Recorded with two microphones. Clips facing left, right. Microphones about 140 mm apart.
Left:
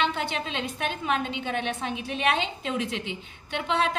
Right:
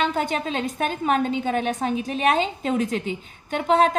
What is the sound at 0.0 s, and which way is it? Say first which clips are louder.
A woman's voice: right 4 dB; 45° right (ahead or behind).